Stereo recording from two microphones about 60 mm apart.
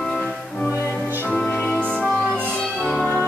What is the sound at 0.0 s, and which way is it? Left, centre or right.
Music, centre.